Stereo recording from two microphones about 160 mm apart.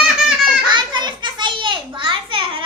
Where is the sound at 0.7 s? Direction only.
30° right (ahead or behind).